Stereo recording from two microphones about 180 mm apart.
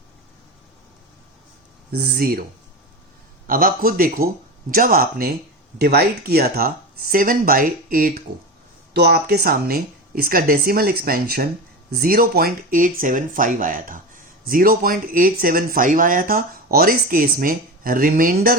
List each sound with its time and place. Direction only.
1.9 s speech: 60° right (ahead or behind)
3.4 s speech: 50° right (ahead or behind)